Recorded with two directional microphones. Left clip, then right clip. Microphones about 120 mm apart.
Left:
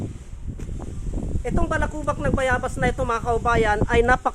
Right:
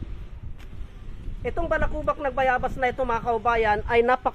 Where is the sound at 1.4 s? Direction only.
20° left (ahead or behind).